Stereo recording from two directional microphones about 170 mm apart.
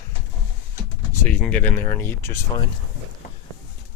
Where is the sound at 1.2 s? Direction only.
10° left (ahead or behind).